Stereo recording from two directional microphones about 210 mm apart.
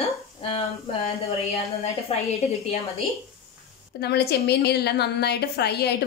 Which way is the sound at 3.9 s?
50° left (ahead or behind).